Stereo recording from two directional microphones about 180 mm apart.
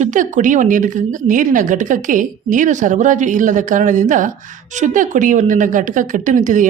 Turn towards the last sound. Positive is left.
turn(degrees=-45)  # may be behind; listen again after turning